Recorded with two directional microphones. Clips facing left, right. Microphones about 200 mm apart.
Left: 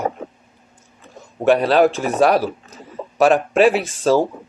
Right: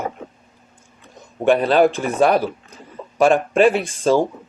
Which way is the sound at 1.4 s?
Centre (ahead or behind).